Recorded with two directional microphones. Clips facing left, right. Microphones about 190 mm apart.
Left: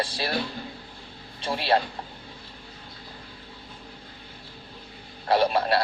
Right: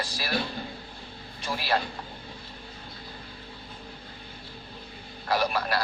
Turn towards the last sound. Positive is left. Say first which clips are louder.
# left 5 dB
turn(degrees=25)  # may be behind; listen again after turning